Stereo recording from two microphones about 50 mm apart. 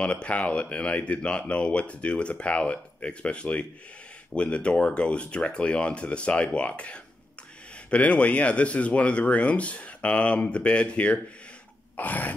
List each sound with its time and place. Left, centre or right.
0.0 s speech: left
12.0 s throat clearing: left